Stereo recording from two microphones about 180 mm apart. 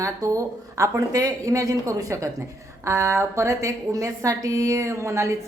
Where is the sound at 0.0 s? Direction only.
20° right (ahead or behind).